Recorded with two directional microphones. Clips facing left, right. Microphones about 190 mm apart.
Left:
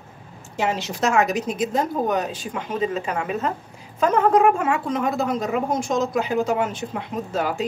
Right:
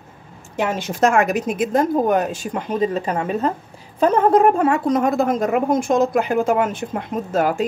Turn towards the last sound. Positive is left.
turn(degrees=-50)  # may be behind; listen again after turning